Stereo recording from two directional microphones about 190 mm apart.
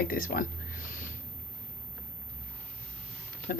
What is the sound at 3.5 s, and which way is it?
Speech, 50° left (ahead or behind).